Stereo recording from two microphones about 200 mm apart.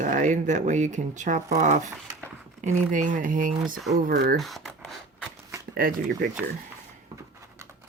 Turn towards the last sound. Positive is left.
turn(degrees=-45)  # may be behind; listen again after turning